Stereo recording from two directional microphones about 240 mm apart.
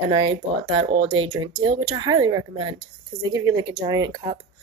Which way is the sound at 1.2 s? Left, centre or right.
Centre.